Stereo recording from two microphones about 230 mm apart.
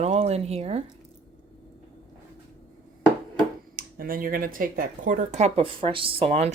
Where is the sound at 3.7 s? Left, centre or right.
Right.